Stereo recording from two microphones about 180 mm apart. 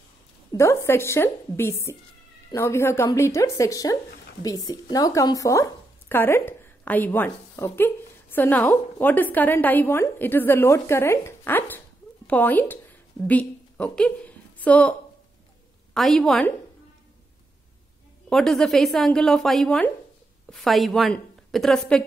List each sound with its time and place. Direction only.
0.6 s a woman's voice: 15° left (ahead or behind)
18.3 s a woman's voice: centre (ahead or behind)